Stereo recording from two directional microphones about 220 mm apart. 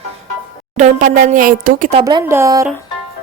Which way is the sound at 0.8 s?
35° right (ahead or behind).